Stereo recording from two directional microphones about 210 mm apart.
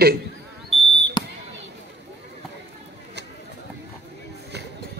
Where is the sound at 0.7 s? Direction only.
Centre (ahead or behind).